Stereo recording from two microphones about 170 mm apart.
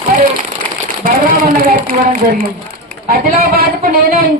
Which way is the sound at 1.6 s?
55° right (ahead or behind).